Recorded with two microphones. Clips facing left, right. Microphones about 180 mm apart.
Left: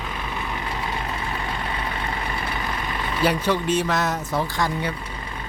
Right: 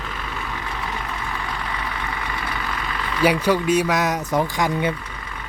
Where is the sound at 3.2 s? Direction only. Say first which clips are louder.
Right 4 dB; 10° right (ahead or behind).